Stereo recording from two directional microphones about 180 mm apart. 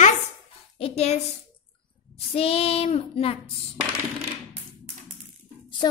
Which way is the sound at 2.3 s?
30° left (ahead or behind).